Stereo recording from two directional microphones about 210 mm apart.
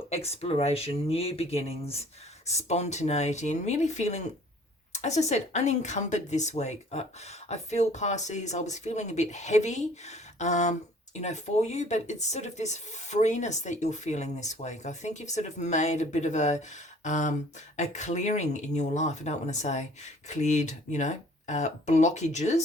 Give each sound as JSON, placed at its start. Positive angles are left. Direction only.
{"t": 0.1, "sound": "speech", "side_deg": 30}